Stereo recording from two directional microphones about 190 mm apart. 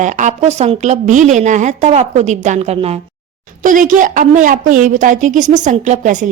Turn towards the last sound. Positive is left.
turn(degrees=-40)  # may be behind; listen again after turning